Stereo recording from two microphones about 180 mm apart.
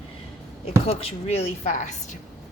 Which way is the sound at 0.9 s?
35° left (ahead or behind).